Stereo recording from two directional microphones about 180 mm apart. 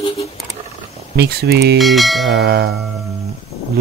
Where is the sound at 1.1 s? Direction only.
65° right (ahead or behind).